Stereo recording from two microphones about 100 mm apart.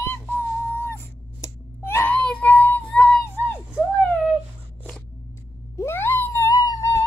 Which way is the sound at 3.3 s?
10° right (ahead or behind).